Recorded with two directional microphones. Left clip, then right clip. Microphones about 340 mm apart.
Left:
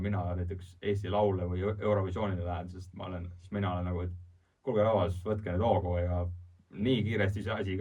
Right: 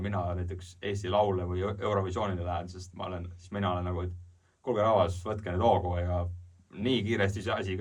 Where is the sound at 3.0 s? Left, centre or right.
Centre.